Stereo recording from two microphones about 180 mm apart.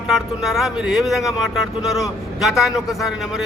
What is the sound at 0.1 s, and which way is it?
A man's voice, centre (ahead or behind).